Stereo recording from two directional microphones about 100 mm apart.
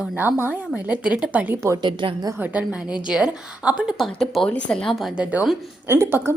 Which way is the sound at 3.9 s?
Centre (ahead or behind).